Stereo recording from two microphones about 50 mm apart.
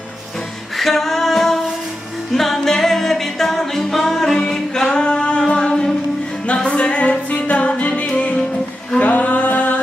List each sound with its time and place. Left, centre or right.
0.8 s music: centre
4.4 s singing: centre
6.5 s music: left
9.0 s a sound: left